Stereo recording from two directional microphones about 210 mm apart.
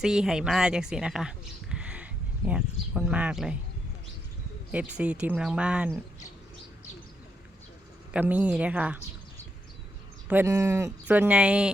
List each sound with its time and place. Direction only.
0.0 s speech: 5° right (ahead or behind)
4.7 s speech: 5° right (ahead or behind)
8.1 s speech: 5° right (ahead or behind)
10.2 s speech: 10° right (ahead or behind)